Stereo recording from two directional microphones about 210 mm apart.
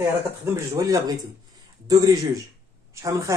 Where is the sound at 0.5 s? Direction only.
15° right (ahead or behind).